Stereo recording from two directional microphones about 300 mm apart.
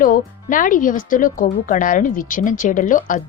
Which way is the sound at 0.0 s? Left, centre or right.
Left.